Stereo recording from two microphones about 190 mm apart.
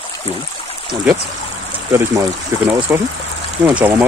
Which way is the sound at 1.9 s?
15° right (ahead or behind).